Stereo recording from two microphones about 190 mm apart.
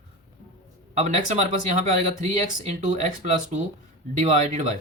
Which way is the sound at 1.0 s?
35° right (ahead or behind).